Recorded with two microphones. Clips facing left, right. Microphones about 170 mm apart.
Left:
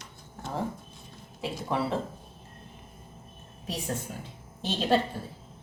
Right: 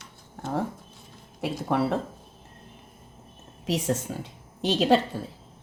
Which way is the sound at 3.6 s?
90° right.